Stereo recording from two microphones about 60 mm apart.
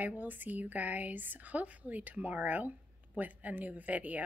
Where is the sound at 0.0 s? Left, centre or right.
Right.